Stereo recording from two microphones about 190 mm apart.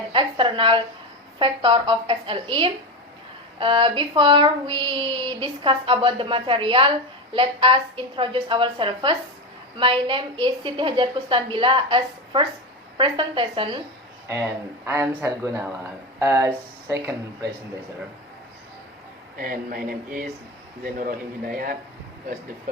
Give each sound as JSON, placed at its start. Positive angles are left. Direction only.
{"t": 0.1, "sound": "a woman's voice", "side_deg": -25}
{"t": 1.4, "sound": "a sound", "side_deg": -25}
{"t": 14.8, "sound": "speech", "side_deg": -10}
{"t": 19.4, "sound": "a man's voice", "side_deg": -50}